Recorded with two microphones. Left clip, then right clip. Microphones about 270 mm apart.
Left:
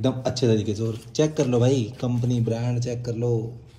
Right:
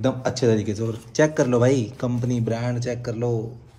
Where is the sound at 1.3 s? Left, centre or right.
Centre.